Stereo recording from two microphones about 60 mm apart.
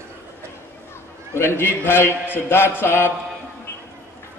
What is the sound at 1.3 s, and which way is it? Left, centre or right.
A man's voice, left.